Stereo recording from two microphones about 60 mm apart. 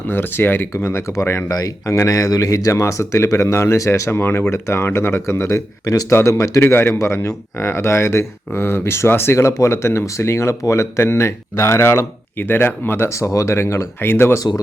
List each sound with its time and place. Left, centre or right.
0.1 s a man's voice: left
1.5 s speech: left
1.9 s speech: left
4.1 s a man's voice: left
5.5 s speech: left
6.1 s a man's voice: left
6.3 s speech: left
6.7 s a man's voice: left
13.1 s a man's voice: left
14.3 s speech: left